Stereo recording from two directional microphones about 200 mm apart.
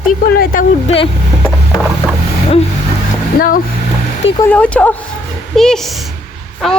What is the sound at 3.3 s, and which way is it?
Speech, 45° left (ahead or behind).